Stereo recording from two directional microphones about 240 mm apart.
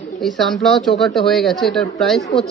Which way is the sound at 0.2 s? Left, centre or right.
Centre.